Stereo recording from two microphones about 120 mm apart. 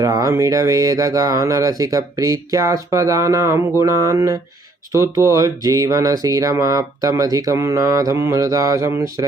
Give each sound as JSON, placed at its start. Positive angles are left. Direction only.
{"t": 0.0, "sound": "speech", "side_deg": -30}